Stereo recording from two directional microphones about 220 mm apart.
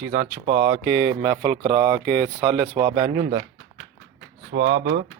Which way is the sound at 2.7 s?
25° right (ahead or behind).